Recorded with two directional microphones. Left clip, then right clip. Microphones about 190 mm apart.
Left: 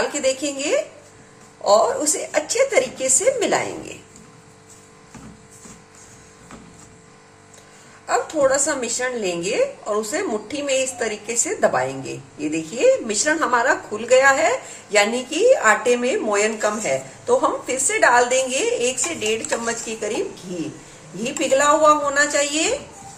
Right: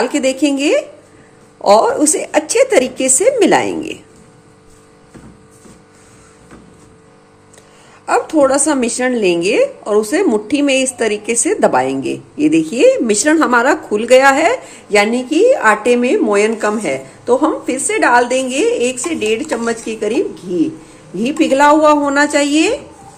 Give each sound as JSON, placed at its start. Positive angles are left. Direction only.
{"t": 0.1, "sound": "speech", "side_deg": -50}
{"t": 8.0, "sound": "speech", "side_deg": -50}
{"t": 21.2, "sound": "speech", "side_deg": -50}